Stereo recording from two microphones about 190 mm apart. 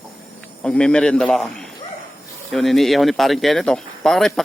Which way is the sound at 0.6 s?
5° left (ahead or behind).